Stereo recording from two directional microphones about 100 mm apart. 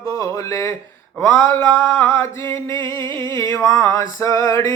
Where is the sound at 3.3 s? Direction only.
35° left (ahead or behind).